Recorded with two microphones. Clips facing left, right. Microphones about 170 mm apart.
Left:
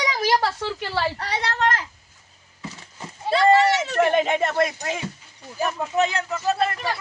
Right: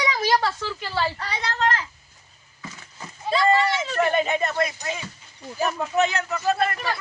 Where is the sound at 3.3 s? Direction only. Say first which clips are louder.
Left 4 dB; 70° left (ahead or behind).